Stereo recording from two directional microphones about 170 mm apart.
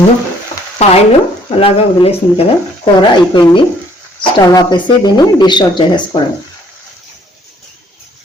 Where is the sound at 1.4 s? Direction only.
30° left (ahead or behind).